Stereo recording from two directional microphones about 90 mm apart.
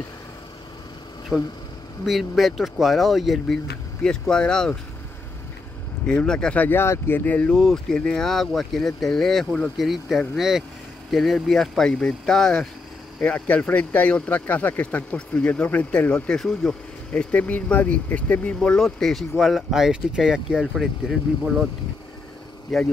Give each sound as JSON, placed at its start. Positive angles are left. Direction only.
{"t": 1.3, "sound": "speech", "side_deg": -5}
{"t": 6.0, "sound": "speech", "side_deg": 10}
{"t": 7.5, "sound": "speech", "side_deg": 5}
{"t": 13.2, "sound": "speech", "side_deg": 15}
{"t": 16.3, "sound": "speech", "side_deg": 5}
{"t": 22.7, "sound": "speech", "side_deg": 0}